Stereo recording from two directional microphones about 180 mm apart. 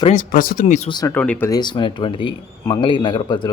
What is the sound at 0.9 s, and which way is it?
Speech, 20° left (ahead or behind).